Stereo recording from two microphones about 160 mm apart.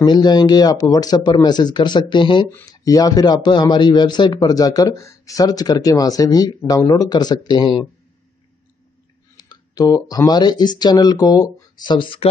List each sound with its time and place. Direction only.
0.0 s speech: 25° left (ahead or behind)
9.4 s speech: 25° left (ahead or behind)